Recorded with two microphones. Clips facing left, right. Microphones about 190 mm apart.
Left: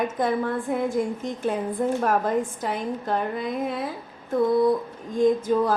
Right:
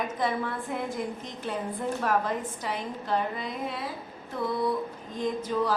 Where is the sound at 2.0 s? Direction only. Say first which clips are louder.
Left 5 dB; 45° left (ahead or behind).